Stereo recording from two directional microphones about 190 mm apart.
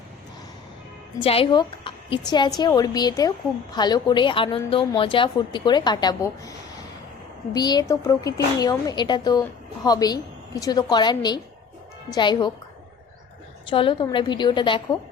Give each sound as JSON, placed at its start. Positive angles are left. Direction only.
{"t": 1.2, "sound": "a woman's voice", "side_deg": 30}
{"t": 7.5, "sound": "a woman's voice", "side_deg": 20}
{"t": 13.7, "sound": "a woman's voice", "side_deg": 25}